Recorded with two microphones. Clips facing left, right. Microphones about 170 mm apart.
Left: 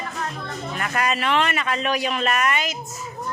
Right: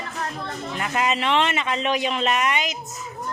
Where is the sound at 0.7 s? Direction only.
20° right (ahead or behind).